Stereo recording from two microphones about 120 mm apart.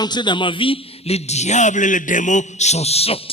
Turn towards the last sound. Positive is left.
turn(degrees=55)  # may be behind; listen again after turning